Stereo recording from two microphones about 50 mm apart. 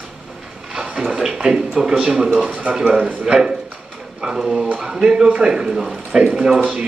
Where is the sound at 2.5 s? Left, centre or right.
Right.